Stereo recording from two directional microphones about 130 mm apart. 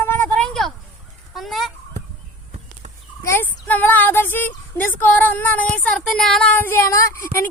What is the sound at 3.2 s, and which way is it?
Speech, 15° left (ahead or behind).